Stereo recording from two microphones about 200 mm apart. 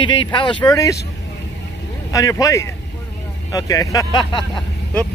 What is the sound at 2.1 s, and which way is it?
Speech, 15° left (ahead or behind).